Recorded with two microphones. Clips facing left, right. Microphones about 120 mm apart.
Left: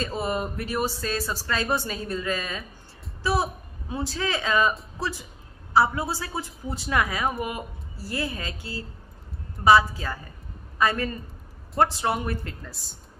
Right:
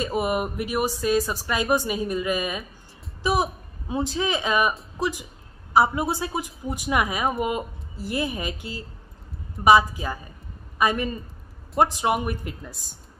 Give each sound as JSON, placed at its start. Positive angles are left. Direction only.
{"t": 0.0, "sound": "a woman's voice", "side_deg": -15}